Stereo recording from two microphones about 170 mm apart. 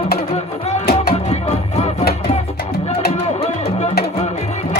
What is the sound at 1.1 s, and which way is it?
Music, 40° left (ahead or behind).